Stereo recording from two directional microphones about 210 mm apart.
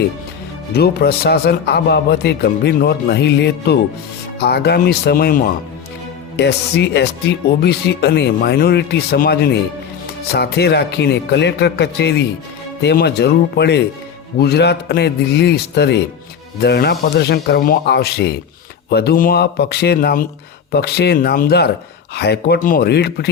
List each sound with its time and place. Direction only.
0.7 s speech: 50° left (ahead or behind)
6.3 s speech: 55° left (ahead or behind)